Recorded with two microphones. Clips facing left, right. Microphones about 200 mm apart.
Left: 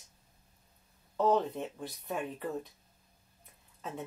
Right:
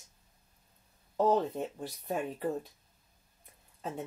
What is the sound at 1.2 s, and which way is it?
Speech, 35° right (ahead or behind).